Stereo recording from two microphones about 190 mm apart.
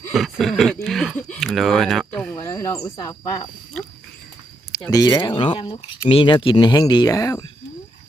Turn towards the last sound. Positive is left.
turn(degrees=15)  # may be behind; listen again after turning